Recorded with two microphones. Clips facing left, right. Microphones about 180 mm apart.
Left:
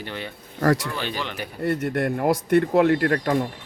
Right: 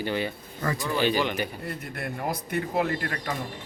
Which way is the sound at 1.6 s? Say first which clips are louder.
Left 11 dB; 70° left (ahead or behind).